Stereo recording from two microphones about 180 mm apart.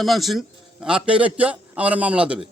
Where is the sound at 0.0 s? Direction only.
Centre (ahead or behind).